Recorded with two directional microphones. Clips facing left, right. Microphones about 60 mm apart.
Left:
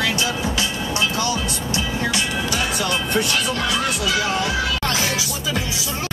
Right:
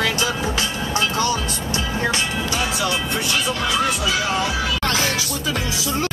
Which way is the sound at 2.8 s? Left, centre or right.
Left.